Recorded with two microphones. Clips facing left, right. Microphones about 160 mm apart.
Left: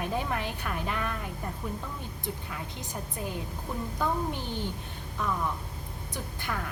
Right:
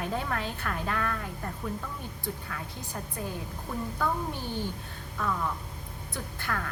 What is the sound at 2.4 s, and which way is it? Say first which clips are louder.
A woman's voice: left 1 dB; 20° left (ahead or behind).